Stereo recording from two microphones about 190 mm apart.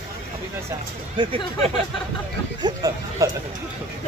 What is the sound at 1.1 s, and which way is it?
Speech, 30° right (ahead or behind).